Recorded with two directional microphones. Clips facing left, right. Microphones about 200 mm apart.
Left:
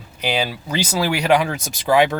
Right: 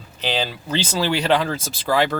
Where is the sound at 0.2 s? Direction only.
10° left (ahead or behind).